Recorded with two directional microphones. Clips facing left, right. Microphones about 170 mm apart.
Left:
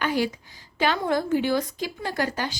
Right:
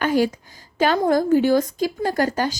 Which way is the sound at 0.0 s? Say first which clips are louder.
Right 6 dB; 45° right (ahead or behind).